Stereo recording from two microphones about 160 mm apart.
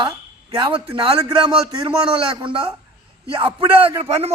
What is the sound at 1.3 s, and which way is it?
Speech, 25° right (ahead or behind).